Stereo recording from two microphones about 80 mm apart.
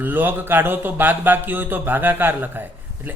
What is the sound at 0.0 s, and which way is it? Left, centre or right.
Speech, right.